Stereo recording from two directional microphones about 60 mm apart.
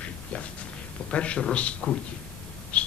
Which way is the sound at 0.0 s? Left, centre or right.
Left.